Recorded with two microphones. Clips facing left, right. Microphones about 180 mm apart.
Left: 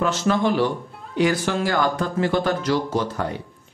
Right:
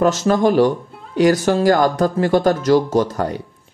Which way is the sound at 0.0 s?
40° right (ahead or behind).